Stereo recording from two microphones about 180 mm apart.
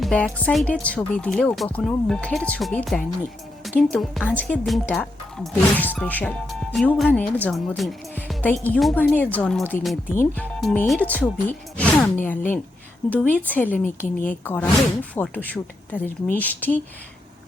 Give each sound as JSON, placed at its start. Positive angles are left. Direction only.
{"t": 0.0, "sound": "speech", "side_deg": 5}
{"t": 13.8, "sound": "speech", "side_deg": 45}
{"t": 14.4, "sound": "speech", "side_deg": 10}